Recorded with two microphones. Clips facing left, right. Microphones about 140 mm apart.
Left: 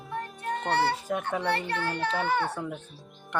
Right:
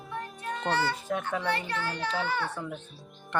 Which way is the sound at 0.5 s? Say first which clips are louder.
Left 2 dB; 60° left (ahead or behind).